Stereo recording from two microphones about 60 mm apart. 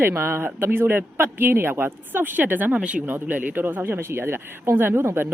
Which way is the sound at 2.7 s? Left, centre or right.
Centre.